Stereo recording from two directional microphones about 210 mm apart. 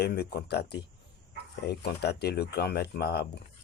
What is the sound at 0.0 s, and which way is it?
Speech, 50° left (ahead or behind).